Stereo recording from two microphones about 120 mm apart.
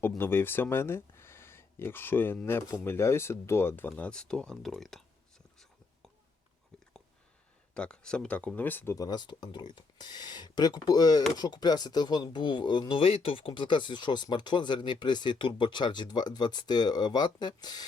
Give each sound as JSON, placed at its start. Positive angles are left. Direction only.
{"t": 0.2, "sound": "speech", "side_deg": 20}
{"t": 7.7, "sound": "speech", "side_deg": 10}
{"t": 9.0, "sound": "speech", "side_deg": 35}